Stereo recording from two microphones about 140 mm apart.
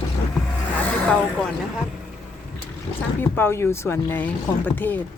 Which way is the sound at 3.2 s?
15° left (ahead or behind).